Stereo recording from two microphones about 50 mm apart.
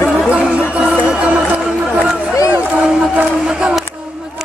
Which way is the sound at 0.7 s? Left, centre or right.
Right.